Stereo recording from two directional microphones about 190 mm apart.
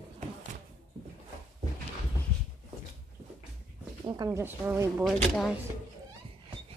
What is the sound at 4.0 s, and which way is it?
Speech, 20° right (ahead or behind).